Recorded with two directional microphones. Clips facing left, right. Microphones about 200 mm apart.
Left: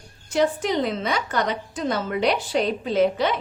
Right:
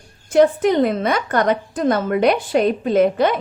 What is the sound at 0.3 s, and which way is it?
A woman's voice, 55° right (ahead or behind).